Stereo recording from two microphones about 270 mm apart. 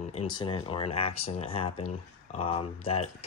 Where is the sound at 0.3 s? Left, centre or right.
Centre.